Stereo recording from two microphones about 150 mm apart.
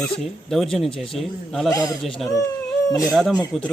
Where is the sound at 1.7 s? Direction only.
25° left (ahead or behind).